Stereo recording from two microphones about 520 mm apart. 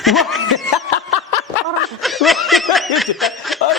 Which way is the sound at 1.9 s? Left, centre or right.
Centre.